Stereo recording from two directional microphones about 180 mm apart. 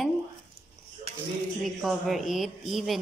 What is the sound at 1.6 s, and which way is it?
Speech, centre (ahead or behind).